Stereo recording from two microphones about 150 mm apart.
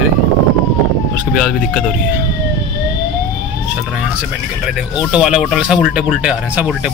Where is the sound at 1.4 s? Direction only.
Centre (ahead or behind).